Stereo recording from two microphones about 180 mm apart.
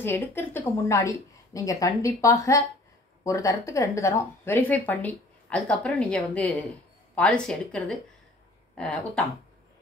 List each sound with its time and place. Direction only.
0.0 s a woman's voice: 10° left (ahead or behind)